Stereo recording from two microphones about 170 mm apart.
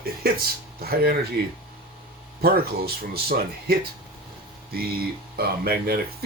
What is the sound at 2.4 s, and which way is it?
Speech, 65° right (ahead or behind).